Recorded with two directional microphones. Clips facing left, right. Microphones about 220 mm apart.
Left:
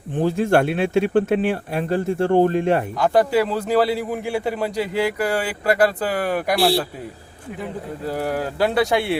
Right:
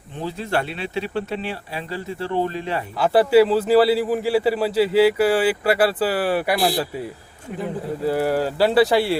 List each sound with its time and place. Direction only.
0.2 s speech: 50° left (ahead or behind)
3.0 s a man's voice: 5° right (ahead or behind)
8.0 s a man's voice: 5° right (ahead or behind)